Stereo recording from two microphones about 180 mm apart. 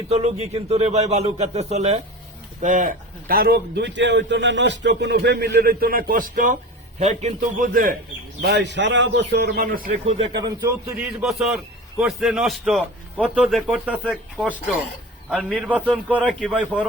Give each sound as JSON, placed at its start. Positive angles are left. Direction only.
{"t": 0.1, "sound": "a man's voice", "side_deg": -35}
{"t": 7.0, "sound": "a man's voice", "side_deg": -40}
{"t": 8.4, "sound": "a man's voice", "side_deg": -65}
{"t": 10.3, "sound": "a man's voice", "side_deg": -25}
{"t": 11.2, "sound": "a man's voice", "side_deg": 0}